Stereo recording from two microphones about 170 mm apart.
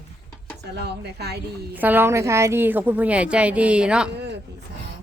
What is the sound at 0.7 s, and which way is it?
Speech, 75° right (ahead or behind).